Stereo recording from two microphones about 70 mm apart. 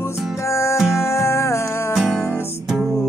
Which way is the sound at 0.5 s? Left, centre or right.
Left.